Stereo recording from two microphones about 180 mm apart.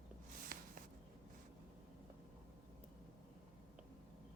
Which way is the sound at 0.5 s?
55° right (ahead or behind).